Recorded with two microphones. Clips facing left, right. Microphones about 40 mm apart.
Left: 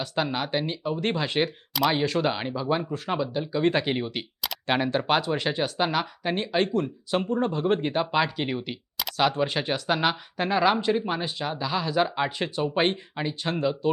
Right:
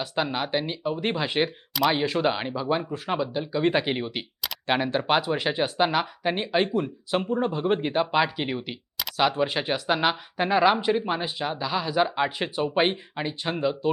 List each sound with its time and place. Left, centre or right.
0.0 s speech: centre